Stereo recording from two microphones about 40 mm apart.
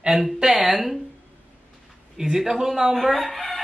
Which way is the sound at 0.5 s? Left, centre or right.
Centre.